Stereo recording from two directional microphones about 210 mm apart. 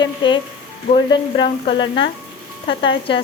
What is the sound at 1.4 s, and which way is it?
Stir, 30° left (ahead or behind).